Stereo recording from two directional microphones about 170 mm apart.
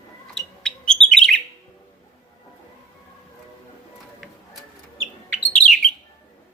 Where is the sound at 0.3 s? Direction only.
5° left (ahead or behind).